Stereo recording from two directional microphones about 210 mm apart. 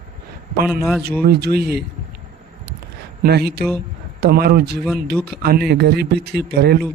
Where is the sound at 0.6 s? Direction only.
Centre (ahead or behind).